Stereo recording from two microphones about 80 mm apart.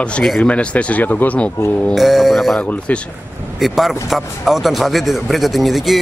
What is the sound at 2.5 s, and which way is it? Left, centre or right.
Speech, centre.